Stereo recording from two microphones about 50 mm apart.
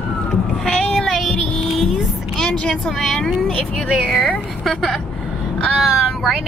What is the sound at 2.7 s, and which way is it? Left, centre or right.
Speech, centre.